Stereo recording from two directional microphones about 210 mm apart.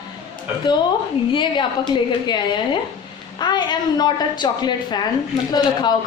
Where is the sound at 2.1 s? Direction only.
20° left (ahead or behind).